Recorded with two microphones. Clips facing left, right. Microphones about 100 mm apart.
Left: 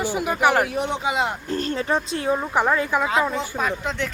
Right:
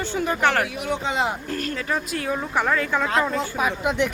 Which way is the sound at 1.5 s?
30° left (ahead or behind).